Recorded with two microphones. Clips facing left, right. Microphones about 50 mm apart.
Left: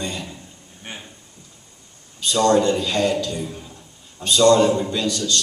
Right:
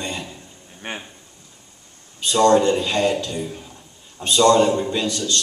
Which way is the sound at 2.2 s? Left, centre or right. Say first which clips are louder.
Right 2 dB; right.